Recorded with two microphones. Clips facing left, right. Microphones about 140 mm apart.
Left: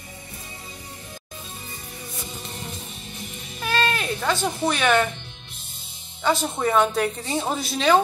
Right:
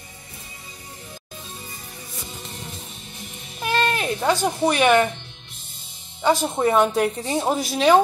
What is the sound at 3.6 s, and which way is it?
Baby cry, 15° right (ahead or behind).